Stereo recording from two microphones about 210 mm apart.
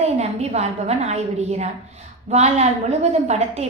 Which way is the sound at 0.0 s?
30° right (ahead or behind).